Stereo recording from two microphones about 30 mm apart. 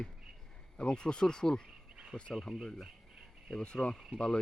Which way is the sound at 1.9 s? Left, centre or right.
Right.